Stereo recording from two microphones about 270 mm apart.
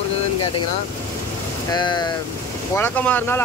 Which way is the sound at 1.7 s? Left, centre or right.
Centre.